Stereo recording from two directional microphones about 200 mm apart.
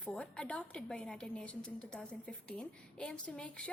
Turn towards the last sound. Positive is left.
turn(degrees=5)  # may be behind; listen again after turning